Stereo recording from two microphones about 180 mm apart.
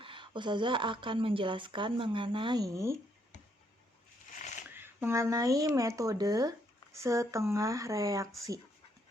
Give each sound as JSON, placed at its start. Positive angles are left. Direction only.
{"t": 0.0, "sound": "a woman's voice", "side_deg": -30}
{"t": 4.7, "sound": "speech", "side_deg": -10}